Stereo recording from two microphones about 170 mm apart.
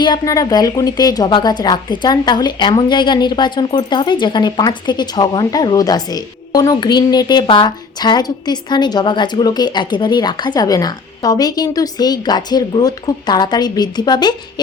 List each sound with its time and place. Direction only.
0.0 s a woman's voice: 25° left (ahead or behind)